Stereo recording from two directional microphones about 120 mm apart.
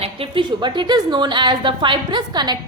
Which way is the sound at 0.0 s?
45° right (ahead or behind).